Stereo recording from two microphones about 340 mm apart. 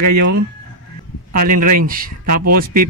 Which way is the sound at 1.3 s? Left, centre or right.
Right.